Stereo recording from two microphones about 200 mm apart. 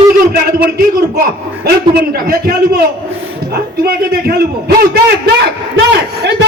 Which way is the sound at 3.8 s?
50° right (ahead or behind).